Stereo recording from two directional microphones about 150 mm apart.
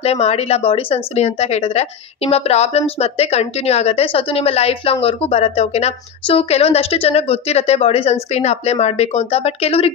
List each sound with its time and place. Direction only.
0.0 s speech: 45° left (ahead or behind)